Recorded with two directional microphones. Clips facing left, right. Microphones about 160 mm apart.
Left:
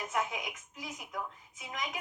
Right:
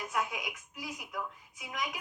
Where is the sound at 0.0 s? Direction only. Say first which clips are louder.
Even; 20° left (ahead or behind).